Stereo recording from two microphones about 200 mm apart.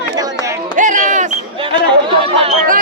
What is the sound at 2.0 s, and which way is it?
Chatter, 30° right (ahead or behind).